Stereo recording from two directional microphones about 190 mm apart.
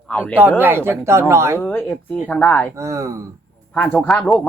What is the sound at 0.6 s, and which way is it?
Speech, 10° right (ahead or behind).